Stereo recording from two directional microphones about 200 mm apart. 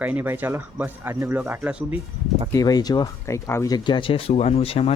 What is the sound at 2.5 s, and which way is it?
Speech, 20° left (ahead or behind).